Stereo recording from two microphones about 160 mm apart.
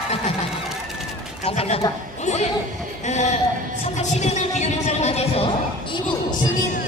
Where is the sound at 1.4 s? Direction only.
40° left (ahead or behind).